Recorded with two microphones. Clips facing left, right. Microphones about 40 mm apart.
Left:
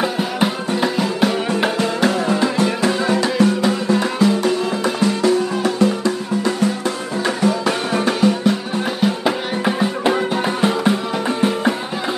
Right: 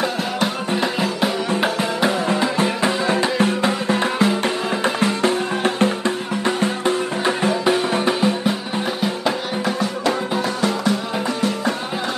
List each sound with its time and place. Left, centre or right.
0.0 s music: centre
0.8 s music: centre
9.7 s music: left